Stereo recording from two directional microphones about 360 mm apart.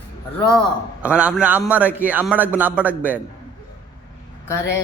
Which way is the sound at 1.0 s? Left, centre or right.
Centre.